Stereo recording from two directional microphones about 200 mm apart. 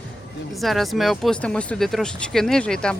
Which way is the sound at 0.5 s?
Centre (ahead or behind).